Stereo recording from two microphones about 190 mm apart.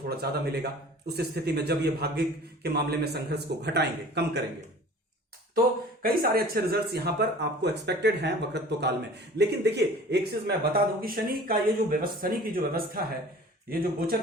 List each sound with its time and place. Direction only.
0.0 s speech: 55° right (ahead or behind)
6.0 s a man's voice: 50° right (ahead or behind)